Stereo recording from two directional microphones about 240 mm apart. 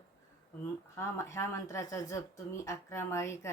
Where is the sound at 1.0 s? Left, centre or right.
Centre.